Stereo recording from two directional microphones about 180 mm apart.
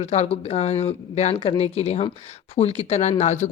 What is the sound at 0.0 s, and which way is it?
Speech, 35° left (ahead or behind).